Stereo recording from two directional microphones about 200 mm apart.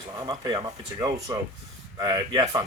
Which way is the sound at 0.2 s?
25° right (ahead or behind).